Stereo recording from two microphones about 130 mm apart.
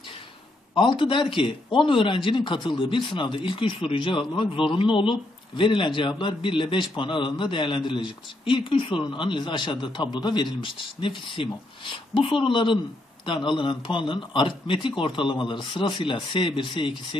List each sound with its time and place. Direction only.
0.7 s a man's voice: 40° left (ahead or behind)